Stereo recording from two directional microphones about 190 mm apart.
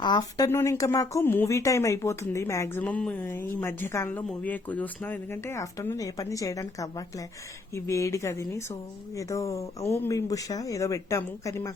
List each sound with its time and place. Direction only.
0.0 s speech: 20° left (ahead or behind)
7.9 s speech: 15° left (ahead or behind)